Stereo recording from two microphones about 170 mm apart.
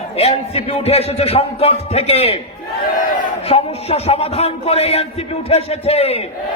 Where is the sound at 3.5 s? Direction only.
35° left (ahead or behind).